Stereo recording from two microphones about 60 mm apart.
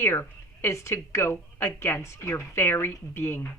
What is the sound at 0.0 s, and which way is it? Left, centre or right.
A woman's voice, left.